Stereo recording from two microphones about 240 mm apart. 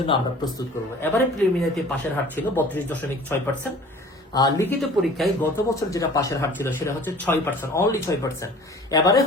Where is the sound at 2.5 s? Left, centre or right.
Centre.